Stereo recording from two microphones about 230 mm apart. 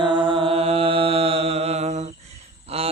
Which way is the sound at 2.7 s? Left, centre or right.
Right.